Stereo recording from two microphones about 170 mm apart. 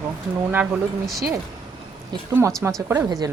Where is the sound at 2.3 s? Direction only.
15° right (ahead or behind).